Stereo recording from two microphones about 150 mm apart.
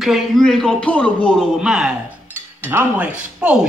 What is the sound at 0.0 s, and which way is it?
Speech, centre (ahead or behind).